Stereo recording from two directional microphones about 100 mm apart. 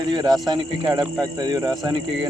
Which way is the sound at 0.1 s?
45° right (ahead or behind).